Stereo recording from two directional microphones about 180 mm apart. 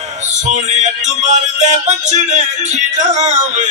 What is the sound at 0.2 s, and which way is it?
Music, 40° right (ahead or behind).